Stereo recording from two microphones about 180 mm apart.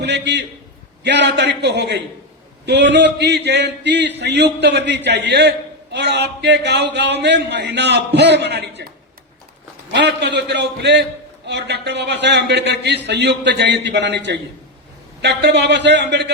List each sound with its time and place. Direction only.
0.0 s a man's voice: 70° right (ahead or behind)
9.9 s a man's voice: 70° right (ahead or behind)